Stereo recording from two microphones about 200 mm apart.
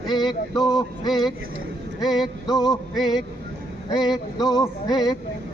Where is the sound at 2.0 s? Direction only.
Centre (ahead or behind).